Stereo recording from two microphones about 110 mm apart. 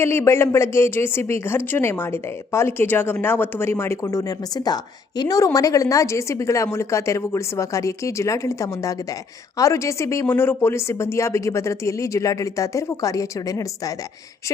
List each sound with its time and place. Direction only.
0.0 s speech: 25° left (ahead or behind)